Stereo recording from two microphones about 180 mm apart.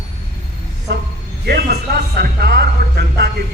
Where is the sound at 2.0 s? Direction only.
65° right (ahead or behind).